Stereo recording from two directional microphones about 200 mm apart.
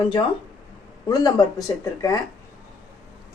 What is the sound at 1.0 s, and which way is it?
Speech, 20° left (ahead or behind).